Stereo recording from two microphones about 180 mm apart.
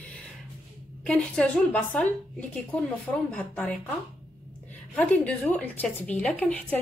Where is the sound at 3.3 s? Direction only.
5° left (ahead or behind).